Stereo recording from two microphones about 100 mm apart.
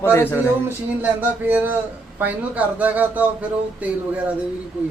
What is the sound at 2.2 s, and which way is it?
Speech, 15° right (ahead or behind).